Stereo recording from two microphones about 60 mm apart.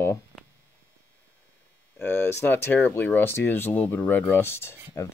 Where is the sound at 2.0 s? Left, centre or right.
Left.